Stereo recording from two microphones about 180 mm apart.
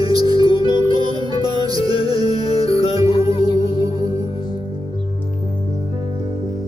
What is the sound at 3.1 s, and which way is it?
Music, 30° left (ahead or behind).